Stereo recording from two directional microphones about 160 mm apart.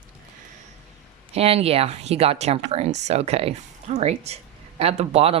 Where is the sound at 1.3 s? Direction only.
40° right (ahead or behind).